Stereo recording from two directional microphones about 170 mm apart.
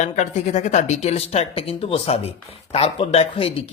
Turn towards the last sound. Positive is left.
turn(degrees=35)  # may be behind; listen again after turning